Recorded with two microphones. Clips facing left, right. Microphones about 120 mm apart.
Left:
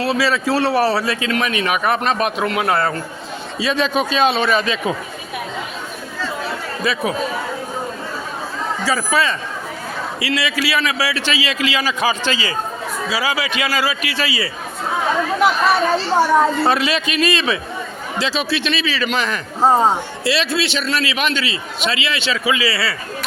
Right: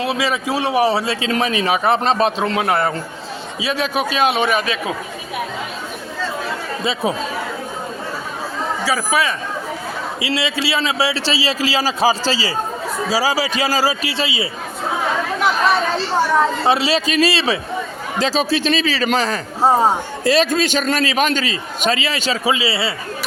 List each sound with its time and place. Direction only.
0.0 s a man's voice: 15° right (ahead or behind)
3.6 s a man's voice: 10° right (ahead or behind)
6.8 s a man's voice: 25° right (ahead or behind)
8.8 s a man's voice: 10° right (ahead or behind)
10.2 s a man's voice: 25° right (ahead or behind)
16.6 s a man's voice: 30° right (ahead or behind)
18.2 s a man's voice: 40° right (ahead or behind)
19.6 s a man's voice: 10° right (ahead or behind)
20.2 s a man's voice: 45° right (ahead or behind); by 23.0 s 25° right (ahead or behind)